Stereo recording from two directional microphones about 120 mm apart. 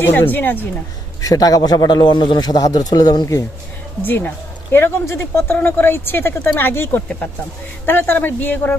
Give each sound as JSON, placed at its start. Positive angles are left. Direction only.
{"t": 0.0, "sound": "speech", "side_deg": 15}
{"t": 1.2, "sound": "a man's voice", "side_deg": 30}
{"t": 4.0, "sound": "speech", "side_deg": 15}